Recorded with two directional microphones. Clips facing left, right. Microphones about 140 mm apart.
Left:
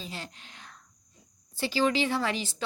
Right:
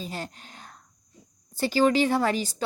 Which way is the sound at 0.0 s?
45° right (ahead or behind).